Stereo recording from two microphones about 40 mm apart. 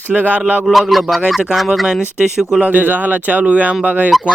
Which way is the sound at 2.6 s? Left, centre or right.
Right.